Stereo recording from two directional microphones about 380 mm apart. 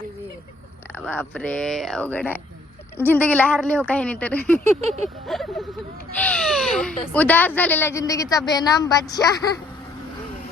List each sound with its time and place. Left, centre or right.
0.9 s speech: centre
4.8 s a sound: centre
5.3 s a woman's voice: centre